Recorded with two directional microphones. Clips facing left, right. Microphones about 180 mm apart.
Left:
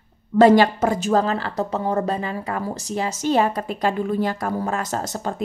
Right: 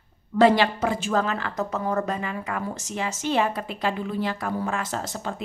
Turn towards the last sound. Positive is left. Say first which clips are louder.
# left 4 dB
turn(degrees=45)  # may be behind; listen again after turning